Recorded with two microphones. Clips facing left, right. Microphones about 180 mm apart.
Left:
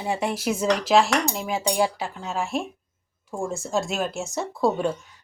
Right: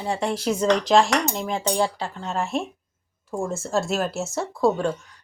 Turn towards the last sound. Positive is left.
turn(degrees=0)  # may be behind; listen again after turning